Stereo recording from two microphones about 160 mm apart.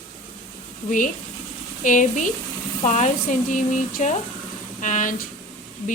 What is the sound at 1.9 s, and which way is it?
Speech, 55° left (ahead or behind).